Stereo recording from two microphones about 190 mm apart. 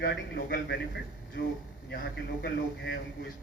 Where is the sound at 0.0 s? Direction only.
55° left (ahead or behind).